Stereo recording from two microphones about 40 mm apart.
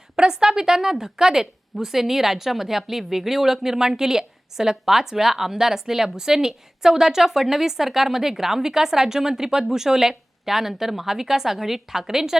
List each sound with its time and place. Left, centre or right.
0.2 s speech: centre